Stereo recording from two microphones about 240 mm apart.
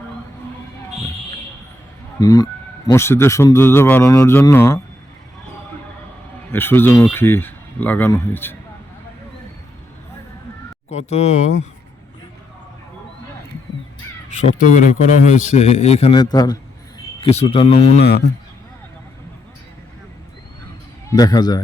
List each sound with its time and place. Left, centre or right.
2.2 s speech: centre
6.5 s speech: centre
10.8 s a man's voice: left
14.4 s a man's voice: left
18.0 s speech: left
21.1 s speech: centre